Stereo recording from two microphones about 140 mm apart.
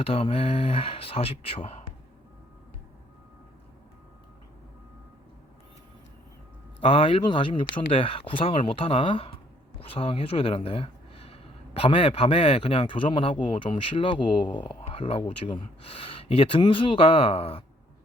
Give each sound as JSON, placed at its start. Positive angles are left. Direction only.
{"t": 0.0, "sound": "speech", "side_deg": 45}
{"t": 6.8, "sound": "speech", "side_deg": 40}